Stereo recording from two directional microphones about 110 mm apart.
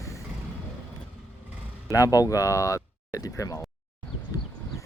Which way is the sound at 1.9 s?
30° left (ahead or behind).